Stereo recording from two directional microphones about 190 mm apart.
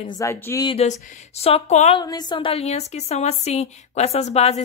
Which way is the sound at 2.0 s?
20° left (ahead or behind).